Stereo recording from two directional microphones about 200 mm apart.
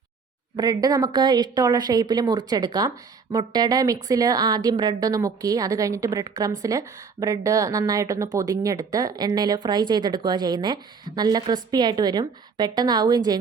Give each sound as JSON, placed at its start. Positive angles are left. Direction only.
{"t": 0.5, "sound": "a woman's voice", "side_deg": -20}